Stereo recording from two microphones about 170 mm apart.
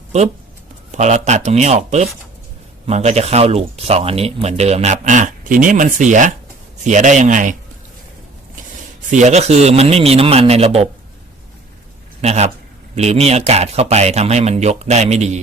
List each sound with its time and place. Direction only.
0.1 s speech: 40° right (ahead or behind)
9.0 s speech: 45° right (ahead or behind)
12.2 s speech: 40° right (ahead or behind)